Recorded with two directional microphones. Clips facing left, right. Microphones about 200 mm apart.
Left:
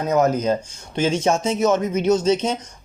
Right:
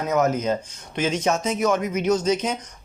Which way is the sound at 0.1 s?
30° left (ahead or behind).